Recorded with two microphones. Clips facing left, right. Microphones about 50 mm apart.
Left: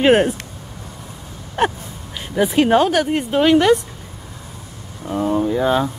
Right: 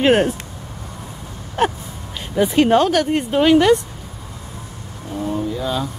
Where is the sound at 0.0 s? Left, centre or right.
Centre.